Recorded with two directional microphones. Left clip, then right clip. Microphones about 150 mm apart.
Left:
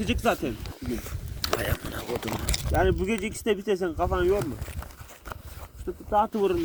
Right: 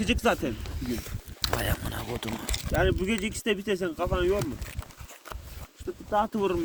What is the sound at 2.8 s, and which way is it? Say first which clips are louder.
Speech: left 1 dB; 25° right (ahead or behind).